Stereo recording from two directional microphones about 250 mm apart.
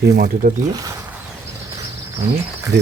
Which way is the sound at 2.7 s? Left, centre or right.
Right.